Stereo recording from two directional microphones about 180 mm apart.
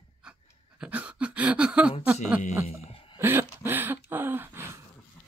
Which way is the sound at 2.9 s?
30° left (ahead or behind).